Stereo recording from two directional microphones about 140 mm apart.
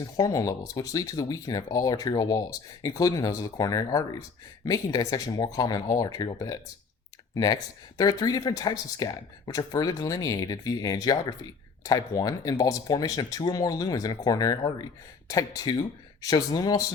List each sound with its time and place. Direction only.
0.0 s speech: 25° left (ahead or behind)